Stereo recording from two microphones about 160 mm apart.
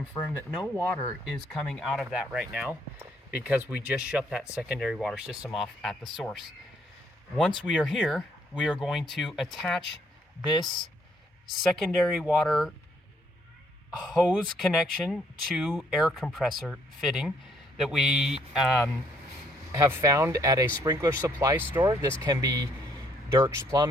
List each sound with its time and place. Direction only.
1.2 s speech: centre (ahead or behind)
10.5 s speech: 30° left (ahead or behind)
11.5 s speech: centre (ahead or behind)
13.9 s speech: centre (ahead or behind)
19.7 s speech: 20° right (ahead or behind)